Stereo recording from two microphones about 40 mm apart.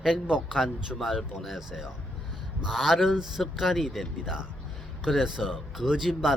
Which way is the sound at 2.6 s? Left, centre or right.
Centre.